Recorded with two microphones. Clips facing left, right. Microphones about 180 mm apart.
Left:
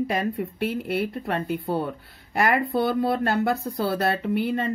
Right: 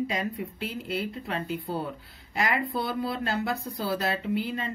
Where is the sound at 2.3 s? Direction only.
50° left (ahead or behind).